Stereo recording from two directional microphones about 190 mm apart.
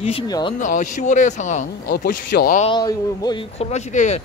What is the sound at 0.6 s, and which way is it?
Speech, 40° left (ahead or behind).